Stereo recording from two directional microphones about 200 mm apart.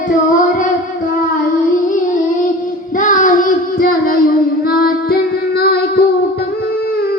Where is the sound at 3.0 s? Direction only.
40° left (ahead or behind).